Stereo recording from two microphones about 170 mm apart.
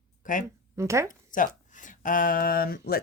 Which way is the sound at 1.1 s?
50° left (ahead or behind).